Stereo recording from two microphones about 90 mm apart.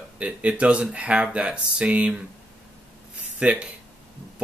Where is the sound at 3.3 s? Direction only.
10° right (ahead or behind).